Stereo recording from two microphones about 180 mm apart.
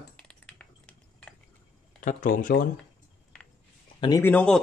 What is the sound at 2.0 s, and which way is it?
Speech, 45° left (ahead or behind).